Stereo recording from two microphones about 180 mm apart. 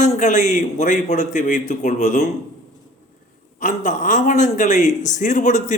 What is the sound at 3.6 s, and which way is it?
A man's voice, 45° left (ahead or behind).